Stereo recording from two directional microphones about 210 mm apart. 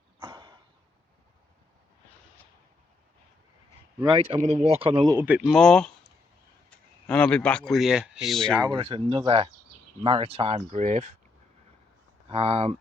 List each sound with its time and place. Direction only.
0.2 s a sound: 20° right (ahead or behind)
4.0 s speech: 25° right (ahead or behind)
5.1 s speech: 5° right (ahead or behind)
8.6 s speech: 25° right (ahead or behind)
12.3 s speech: 30° right (ahead or behind)